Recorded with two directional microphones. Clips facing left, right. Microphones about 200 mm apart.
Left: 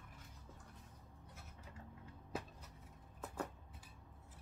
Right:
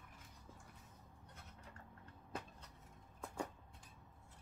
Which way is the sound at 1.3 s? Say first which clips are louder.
Left 1 dB; 5° left (ahead or behind).